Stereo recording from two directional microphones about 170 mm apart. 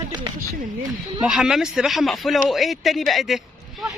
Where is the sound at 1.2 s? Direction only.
5° right (ahead or behind).